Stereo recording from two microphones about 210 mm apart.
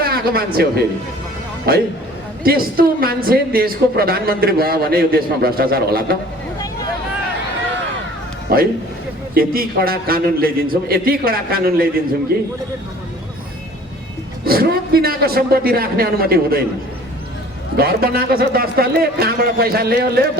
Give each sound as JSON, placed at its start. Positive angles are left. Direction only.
{"t": 0.0, "sound": "a woman's voice", "side_deg": -45}
{"t": 8.5, "sound": "a woman's voice", "side_deg": -45}
{"t": 14.4, "sound": "a man's voice", "side_deg": -45}
{"t": 17.7, "sound": "a woman's voice", "side_deg": -45}